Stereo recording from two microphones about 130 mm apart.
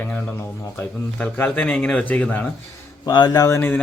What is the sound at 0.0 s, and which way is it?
Speech, 10° left (ahead or behind).